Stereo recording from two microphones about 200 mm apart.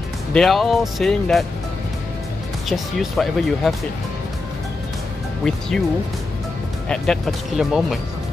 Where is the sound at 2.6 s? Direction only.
Centre (ahead or behind).